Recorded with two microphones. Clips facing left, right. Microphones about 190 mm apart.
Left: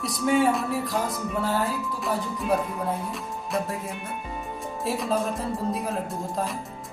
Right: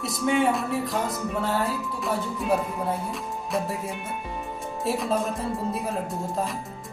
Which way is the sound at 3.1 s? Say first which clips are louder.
Right 1 dB; centre (ahead or behind).